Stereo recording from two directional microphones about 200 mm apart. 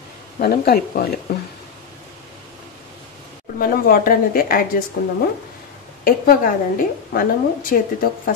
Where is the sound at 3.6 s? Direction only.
45° left (ahead or behind).